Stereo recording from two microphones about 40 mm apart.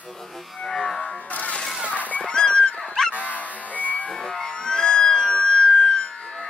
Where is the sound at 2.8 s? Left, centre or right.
Centre.